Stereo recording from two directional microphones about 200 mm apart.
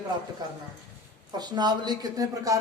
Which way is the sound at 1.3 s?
20° right (ahead or behind).